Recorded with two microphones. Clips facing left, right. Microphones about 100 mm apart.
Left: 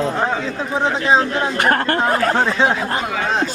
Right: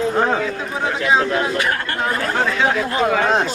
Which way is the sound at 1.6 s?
45° left (ahead or behind).